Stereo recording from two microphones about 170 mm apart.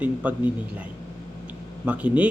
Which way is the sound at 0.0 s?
10° right (ahead or behind).